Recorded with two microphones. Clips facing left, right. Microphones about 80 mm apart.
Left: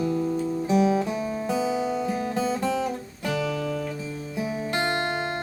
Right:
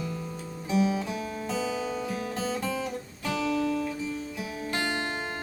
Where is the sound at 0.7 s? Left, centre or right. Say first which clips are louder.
Left 4 dB; left.